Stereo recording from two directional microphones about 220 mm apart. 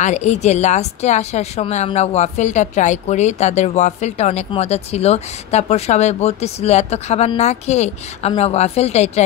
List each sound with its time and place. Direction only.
0.0 s a woman's voice: 30° left (ahead or behind)